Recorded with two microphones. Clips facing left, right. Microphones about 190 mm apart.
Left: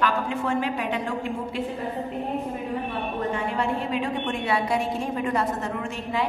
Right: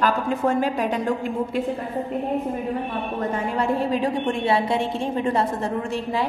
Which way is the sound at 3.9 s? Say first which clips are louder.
Right 4 dB; 35° right (ahead or behind).